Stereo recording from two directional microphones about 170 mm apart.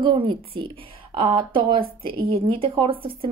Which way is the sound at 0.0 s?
30° right (ahead or behind).